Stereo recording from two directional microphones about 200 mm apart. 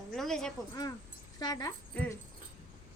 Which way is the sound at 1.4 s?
20° left (ahead or behind).